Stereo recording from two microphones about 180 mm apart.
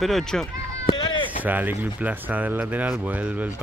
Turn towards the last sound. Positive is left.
turn(degrees=-10)  # may be behind; listen again after turning